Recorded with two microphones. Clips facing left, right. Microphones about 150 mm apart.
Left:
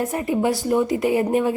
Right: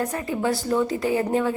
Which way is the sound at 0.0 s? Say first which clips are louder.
Left 4 dB; 20° left (ahead or behind).